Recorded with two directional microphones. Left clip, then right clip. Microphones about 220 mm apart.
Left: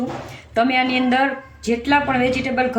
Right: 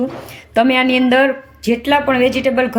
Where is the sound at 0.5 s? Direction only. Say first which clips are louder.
Right 4 dB; 40° right (ahead or behind).